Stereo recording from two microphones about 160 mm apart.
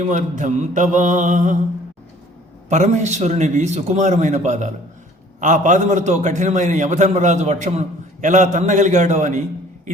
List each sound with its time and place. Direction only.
0.1 s a man's voice: 50° right (ahead or behind)
2.6 s a man's voice: 45° right (ahead or behind)